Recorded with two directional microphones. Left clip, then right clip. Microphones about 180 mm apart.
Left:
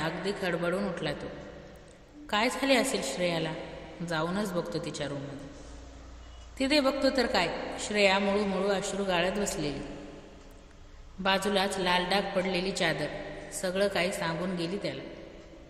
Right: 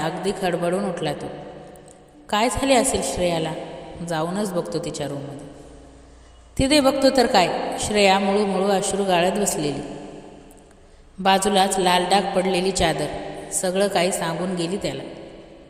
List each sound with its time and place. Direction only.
0.0 s a woman's voice: 35° right (ahead or behind)
6.6 s a woman's voice: 35° right (ahead or behind)
11.2 s a woman's voice: 35° right (ahead or behind)